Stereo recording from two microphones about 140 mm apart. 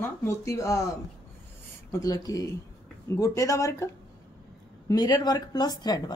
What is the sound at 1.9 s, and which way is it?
Speech, 25° left (ahead or behind).